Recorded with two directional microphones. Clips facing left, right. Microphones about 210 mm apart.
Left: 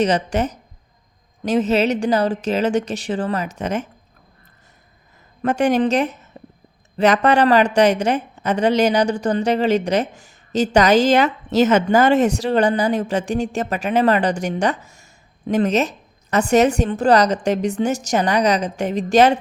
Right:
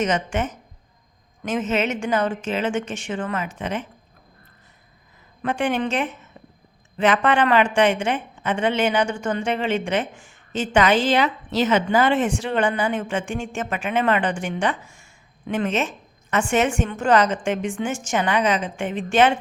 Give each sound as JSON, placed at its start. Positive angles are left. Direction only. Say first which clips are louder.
{"t": 0.0, "sound": "a woman's voice", "louder": "left 4 dB", "side_deg": 35}
{"t": 5.4, "sound": "a woman's voice", "louder": "left 6 dB", "side_deg": 40}
{"t": 6.3, "sound": "a sound", "louder": "left 5 dB", "side_deg": 35}
{"t": 6.9, "sound": "a woman's voice", "louder": "left 4 dB", "side_deg": 40}